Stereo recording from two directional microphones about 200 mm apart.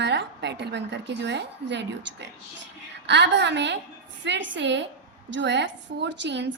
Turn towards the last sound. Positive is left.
turn(degrees=-60)  # may be behind; listen again after turning